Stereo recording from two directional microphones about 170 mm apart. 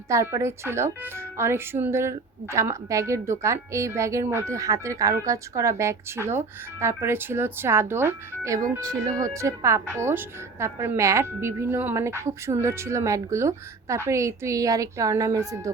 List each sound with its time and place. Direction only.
0.1 s a woman's voice: 15° right (ahead or behind)